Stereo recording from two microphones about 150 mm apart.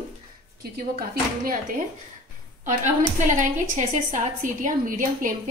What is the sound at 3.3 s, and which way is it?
A woman's voice, 55° right (ahead or behind).